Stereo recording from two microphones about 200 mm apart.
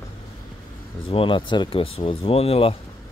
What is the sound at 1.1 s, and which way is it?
Speech, 25° left (ahead or behind).